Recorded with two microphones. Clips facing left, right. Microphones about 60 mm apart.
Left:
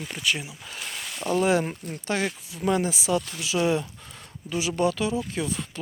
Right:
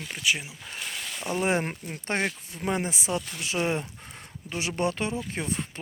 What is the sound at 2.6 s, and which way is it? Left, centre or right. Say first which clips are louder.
Speech: left 5 dB; right.